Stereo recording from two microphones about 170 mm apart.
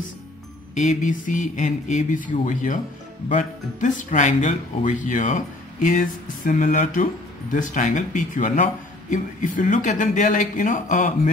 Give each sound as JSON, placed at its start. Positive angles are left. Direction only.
{"t": 0.7, "sound": "speech", "side_deg": 45}